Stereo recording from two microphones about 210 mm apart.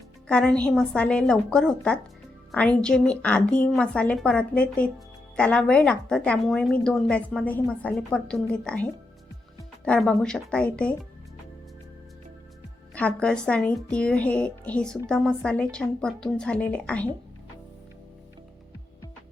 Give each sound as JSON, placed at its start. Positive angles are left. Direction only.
{"t": 0.3, "sound": "a woman's voice", "side_deg": 5}
{"t": 12.9, "sound": "a woman's voice", "side_deg": 5}